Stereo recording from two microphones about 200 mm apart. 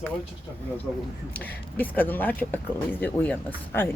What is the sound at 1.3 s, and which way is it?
Speech, 10° left (ahead or behind).